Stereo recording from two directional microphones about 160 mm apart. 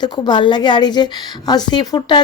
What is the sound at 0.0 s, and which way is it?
Speech, 30° left (ahead or behind).